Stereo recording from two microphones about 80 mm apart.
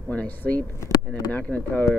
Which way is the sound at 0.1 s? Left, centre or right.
Centre.